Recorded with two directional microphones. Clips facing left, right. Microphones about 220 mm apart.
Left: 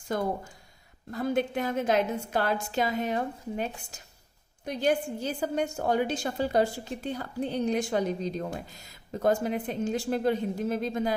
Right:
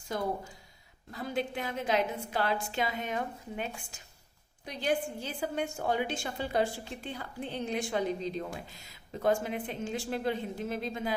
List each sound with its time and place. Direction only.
0.1 s a woman's voice: 50° left (ahead or behind)